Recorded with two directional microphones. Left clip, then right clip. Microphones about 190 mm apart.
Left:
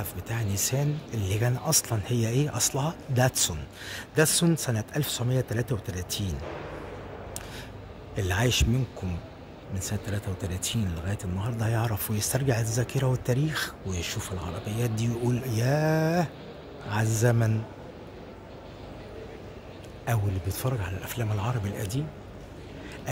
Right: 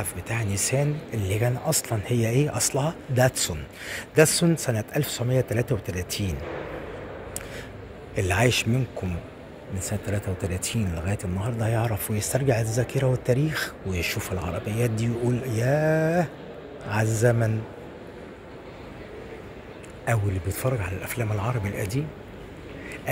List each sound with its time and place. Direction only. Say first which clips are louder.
0.0 s speech: right 5 dB; 15° left (ahead or behind)
8.2 s speech: right 4 dB; 15° left (ahead or behind)
10.4 s speech: right 3 dB; 55° left (ahead or behind)
11.0 s speech: right 5 dB; 10° left (ahead or behind)
20.1 s speech: right 5 dB; 15° left (ahead or behind)